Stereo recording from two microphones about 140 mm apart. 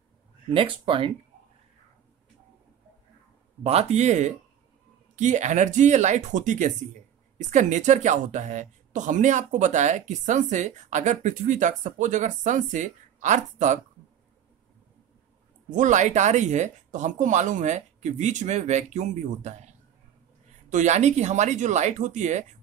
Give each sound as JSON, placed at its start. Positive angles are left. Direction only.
{"t": 0.5, "sound": "speech", "side_deg": -40}
{"t": 3.6, "sound": "speech", "side_deg": -50}
{"t": 15.7, "sound": "speech", "side_deg": -60}
{"t": 20.7, "sound": "speech", "side_deg": -55}